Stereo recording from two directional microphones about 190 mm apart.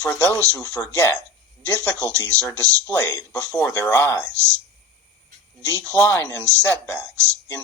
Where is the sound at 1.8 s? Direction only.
15° right (ahead or behind).